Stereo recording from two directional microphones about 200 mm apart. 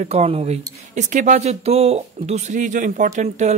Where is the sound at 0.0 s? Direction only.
30° right (ahead or behind).